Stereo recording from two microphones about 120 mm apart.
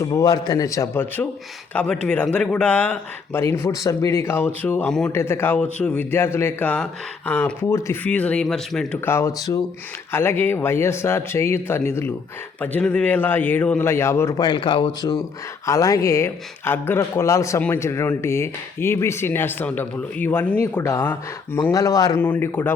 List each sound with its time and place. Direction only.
0.0 s a man's voice: 30° left (ahead or behind); by 3.4 s 10° left (ahead or behind)
3.4 s a man's voice: 25° left (ahead or behind)
4.9 s speech: 5° left (ahead or behind)
5.1 s a man's voice: 20° left (ahead or behind)
8.0 s a man's voice: 10° left (ahead or behind)
9.0 s a man's voice: 25° left (ahead or behind)
21.7 s speech: 30° left (ahead or behind)
22.2 s a man's voice: 15° left (ahead or behind)